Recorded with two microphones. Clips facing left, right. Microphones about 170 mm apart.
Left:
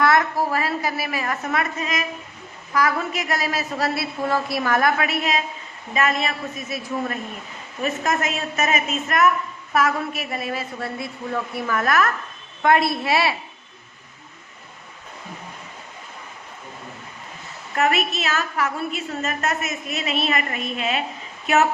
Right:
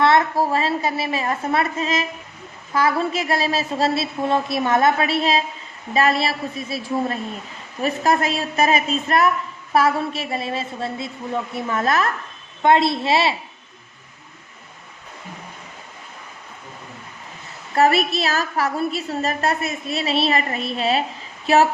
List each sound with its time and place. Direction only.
0.0 s a woman's voice: 25° right (ahead or behind)
17.7 s a woman's voice: 35° right (ahead or behind)